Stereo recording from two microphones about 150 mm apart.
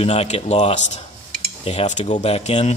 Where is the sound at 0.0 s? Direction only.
45° left (ahead or behind).